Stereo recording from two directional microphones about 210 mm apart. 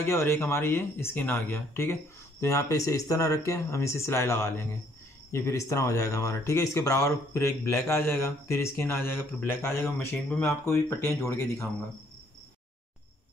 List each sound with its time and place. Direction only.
0.0 s speech: 10° left (ahead or behind)